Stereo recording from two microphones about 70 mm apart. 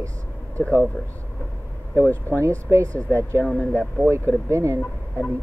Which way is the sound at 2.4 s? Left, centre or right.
Right.